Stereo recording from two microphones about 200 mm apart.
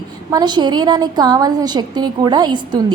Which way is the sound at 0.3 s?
20° right (ahead or behind).